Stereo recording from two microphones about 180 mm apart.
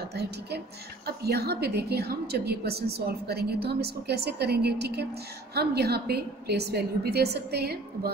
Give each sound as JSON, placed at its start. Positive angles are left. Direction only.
{"t": 0.0, "sound": "a woman's voice", "side_deg": -65}